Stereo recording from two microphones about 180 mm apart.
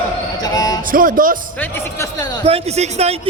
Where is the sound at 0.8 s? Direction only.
50° right (ahead or behind).